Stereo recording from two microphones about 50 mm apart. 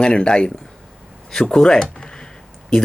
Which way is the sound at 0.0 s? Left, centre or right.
Centre.